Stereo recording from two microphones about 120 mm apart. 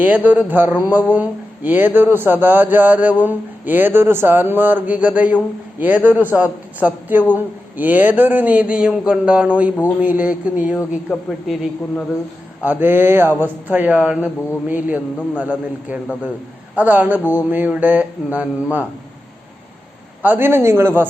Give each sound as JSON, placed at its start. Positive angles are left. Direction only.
{"t": 0.0, "sound": "speech", "side_deg": -15}
{"t": 12.8, "sound": "speech", "side_deg": -15}
{"t": 20.2, "sound": "speech", "side_deg": -15}